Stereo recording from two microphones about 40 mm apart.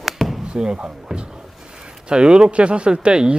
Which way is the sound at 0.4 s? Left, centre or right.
Right.